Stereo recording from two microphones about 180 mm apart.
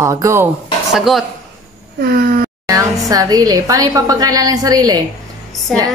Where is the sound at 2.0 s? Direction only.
55° right (ahead or behind).